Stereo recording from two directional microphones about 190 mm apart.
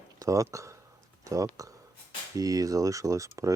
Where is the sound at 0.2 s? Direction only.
15° right (ahead or behind).